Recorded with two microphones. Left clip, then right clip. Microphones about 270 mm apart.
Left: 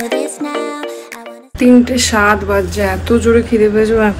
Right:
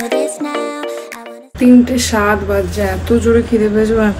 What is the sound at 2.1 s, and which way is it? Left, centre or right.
Speech, left.